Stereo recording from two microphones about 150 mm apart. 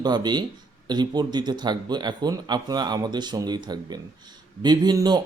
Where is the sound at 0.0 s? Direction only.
30° right (ahead or behind).